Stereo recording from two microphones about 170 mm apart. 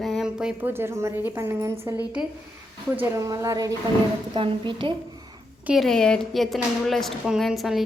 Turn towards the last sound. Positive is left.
turn(degrees=0)  # may be behind; listen again after turning